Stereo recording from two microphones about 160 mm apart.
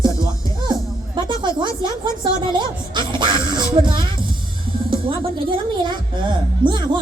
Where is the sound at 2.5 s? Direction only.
30° right (ahead or behind).